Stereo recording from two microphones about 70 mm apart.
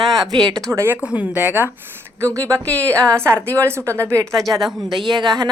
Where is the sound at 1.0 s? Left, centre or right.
Centre.